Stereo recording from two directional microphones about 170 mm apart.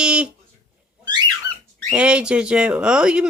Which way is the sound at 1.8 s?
5° right (ahead or behind).